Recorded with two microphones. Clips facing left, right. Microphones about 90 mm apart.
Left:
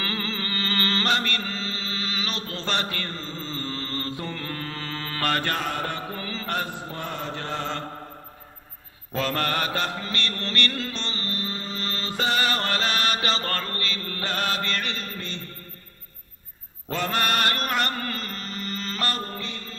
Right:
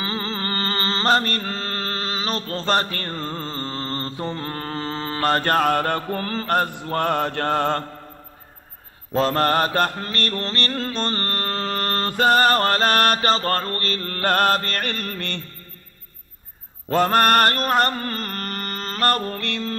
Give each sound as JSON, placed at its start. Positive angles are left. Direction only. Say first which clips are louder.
{"t": 0.0, "sound": "music", "louder": "right 3 dB", "side_deg": -35}
{"t": 0.7, "sound": "mantra", "louder": "right 5 dB", "side_deg": -30}
{"t": 5.4, "sound": "mantra", "louder": "right 9 dB", "side_deg": -50}
{"t": 9.1, "sound": "mantra", "louder": "right 7 dB", "side_deg": -35}
{"t": 16.9, "sound": "mantra", "louder": "right 9 dB", "side_deg": -45}